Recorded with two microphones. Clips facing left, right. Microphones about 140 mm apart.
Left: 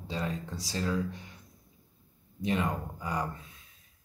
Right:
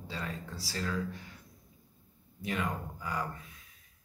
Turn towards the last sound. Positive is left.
turn(degrees=20)  # may be behind; listen again after turning